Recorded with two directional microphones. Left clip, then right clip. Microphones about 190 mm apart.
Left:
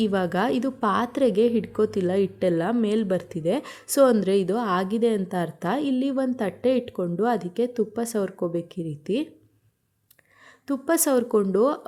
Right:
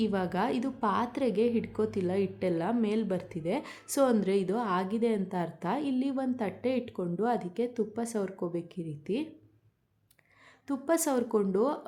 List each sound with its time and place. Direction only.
0.0 s a woman's voice: 25° left (ahead or behind)
10.7 s a woman's voice: 25° left (ahead or behind)